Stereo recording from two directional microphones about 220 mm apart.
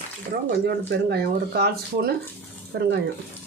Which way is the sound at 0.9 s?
45° right (ahead or behind).